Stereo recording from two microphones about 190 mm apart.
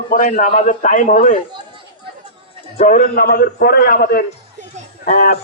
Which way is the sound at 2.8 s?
50° left (ahead or behind).